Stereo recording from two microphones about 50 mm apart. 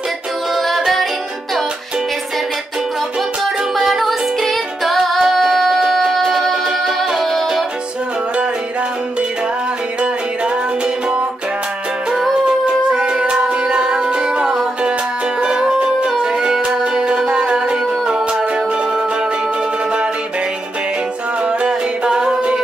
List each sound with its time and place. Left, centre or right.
0.6 s music: centre
3.7 s music: centre
12.4 s music: centre
21.5 s music: centre